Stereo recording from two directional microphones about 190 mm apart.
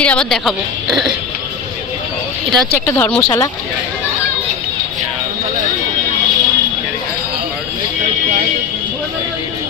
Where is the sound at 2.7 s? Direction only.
10° left (ahead or behind).